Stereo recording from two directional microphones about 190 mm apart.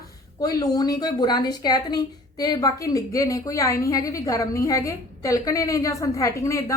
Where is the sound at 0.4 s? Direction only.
20° left (ahead or behind).